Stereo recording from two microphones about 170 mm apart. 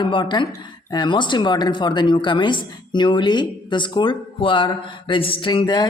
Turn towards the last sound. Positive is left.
turn(degrees=25)  # may be behind; listen again after turning